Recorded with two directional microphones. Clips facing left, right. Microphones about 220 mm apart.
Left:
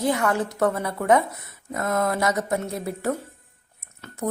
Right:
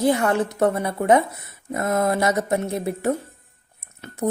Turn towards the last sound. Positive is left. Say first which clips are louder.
# right 4 dB
turn(degrees=-20)  # may be behind; listen again after turning